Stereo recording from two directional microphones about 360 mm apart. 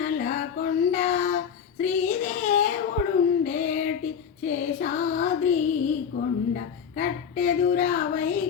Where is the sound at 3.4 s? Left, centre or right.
Left.